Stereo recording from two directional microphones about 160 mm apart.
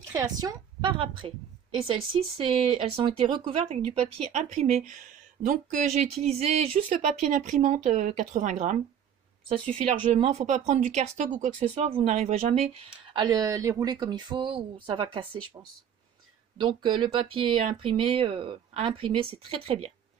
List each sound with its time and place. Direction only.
0.0 s speech: 20° right (ahead or behind); by 8.7 s 50° right (ahead or behind)
9.9 s speech: 35° right (ahead or behind)
11.7 s speech: 40° right (ahead or behind)
13.1 s speech: 25° right (ahead or behind)
16.5 s speech: 30° right (ahead or behind)